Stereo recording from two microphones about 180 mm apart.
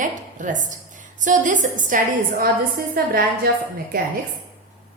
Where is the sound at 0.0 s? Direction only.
45° right (ahead or behind).